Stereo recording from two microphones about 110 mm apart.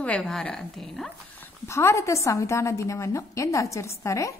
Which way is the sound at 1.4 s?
25° left (ahead or behind).